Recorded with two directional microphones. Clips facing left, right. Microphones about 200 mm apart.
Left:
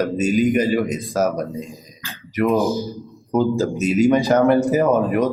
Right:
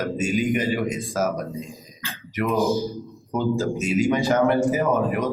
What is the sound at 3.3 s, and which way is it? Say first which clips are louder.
Speech: left 4 dB; 40° left (ahead or behind).